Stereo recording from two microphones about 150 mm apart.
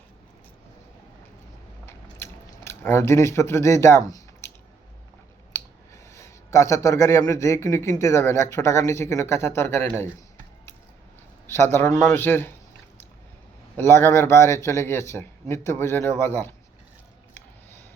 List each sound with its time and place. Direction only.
1.9 s chewing: 15° left (ahead or behind)
5.5 s speech: 20° left (ahead or behind)
11.4 s a man's voice: 15° left (ahead or behind)
13.7 s a man's voice: 15° left (ahead or behind)